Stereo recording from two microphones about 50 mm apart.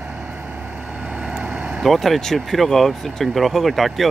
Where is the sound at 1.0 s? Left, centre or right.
Right.